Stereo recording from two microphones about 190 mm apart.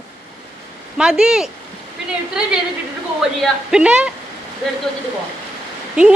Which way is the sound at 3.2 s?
5° right (ahead or behind).